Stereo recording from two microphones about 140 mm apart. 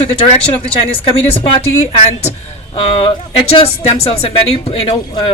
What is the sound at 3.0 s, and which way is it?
Speech, 45° left (ahead or behind).